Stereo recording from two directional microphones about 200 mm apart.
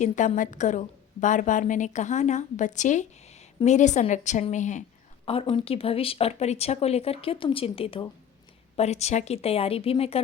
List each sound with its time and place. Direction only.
0.0 s a woman's voice: 35° left (ahead or behind)